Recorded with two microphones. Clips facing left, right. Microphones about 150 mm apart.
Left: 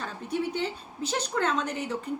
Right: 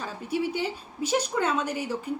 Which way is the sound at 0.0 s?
5° right (ahead or behind).